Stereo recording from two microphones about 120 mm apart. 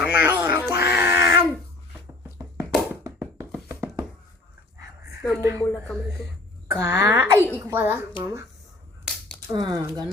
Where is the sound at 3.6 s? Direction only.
20° right (ahead or behind).